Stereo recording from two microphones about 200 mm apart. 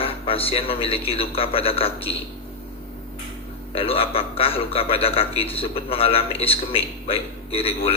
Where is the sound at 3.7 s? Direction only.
30° left (ahead or behind).